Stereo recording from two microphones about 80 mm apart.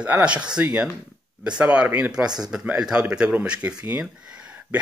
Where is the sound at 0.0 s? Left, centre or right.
Centre.